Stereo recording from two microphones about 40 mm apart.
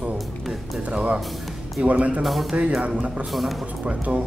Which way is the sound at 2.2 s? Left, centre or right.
Centre.